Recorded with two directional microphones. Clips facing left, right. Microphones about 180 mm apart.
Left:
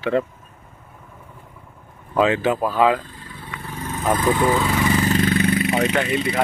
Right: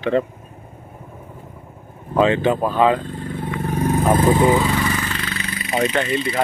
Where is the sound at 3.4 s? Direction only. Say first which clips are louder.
Right 10 dB; 45° right (ahead or behind); by 4.6 s 20° right (ahead or behind).